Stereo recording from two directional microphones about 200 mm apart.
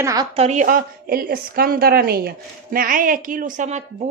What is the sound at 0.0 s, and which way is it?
Speech, 20° right (ahead or behind).